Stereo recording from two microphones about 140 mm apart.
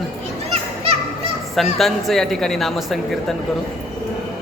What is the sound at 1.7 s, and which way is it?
A man's voice, centre (ahead or behind).